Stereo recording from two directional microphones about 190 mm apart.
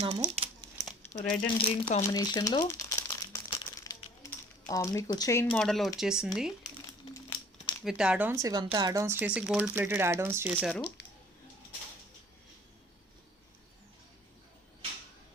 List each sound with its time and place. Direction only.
0.3 s crumpling: 30° right (ahead or behind)
1.0 s coin: 10° left (ahead or behind)
1.6 s speech: 30° left (ahead or behind)
2.0 s speech: 20° left (ahead or behind)
2.6 s crumpling: 15° left (ahead or behind)
4.3 s speech: 15° left (ahead or behind)
5.5 s speech: centre (ahead or behind)
7.0 s crumpling: 20° left (ahead or behind)
7.9 s speech: 5° right (ahead or behind)